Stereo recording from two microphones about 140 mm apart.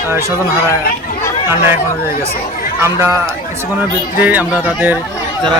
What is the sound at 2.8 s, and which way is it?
Speech, 20° right (ahead or behind).